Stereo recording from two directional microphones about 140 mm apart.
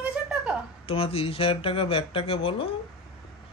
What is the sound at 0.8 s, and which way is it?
A man's voice, 40° left (ahead or behind).